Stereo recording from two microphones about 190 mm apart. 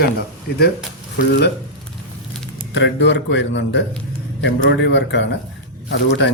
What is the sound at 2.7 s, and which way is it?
Speech, 70° left (ahead or behind).